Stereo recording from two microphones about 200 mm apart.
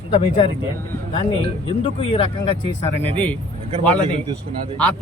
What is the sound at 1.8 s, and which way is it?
Speech, 25° left (ahead or behind).